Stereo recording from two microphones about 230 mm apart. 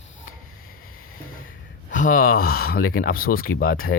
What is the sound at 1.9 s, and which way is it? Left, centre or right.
Speech, left.